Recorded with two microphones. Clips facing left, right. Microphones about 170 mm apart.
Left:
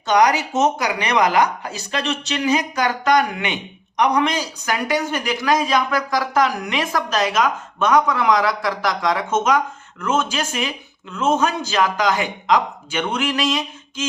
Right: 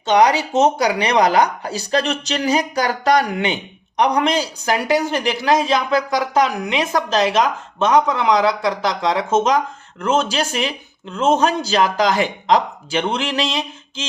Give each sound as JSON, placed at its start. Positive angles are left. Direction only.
{"t": 0.0, "sound": "speech", "side_deg": -25}